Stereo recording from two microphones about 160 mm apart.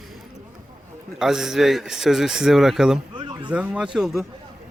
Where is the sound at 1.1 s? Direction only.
5° right (ahead or behind).